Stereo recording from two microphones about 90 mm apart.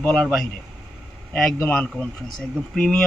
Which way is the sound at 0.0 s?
10° left (ahead or behind).